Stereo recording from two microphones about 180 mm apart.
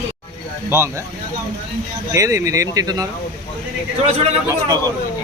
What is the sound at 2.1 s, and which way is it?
Speech, 15° right (ahead or behind).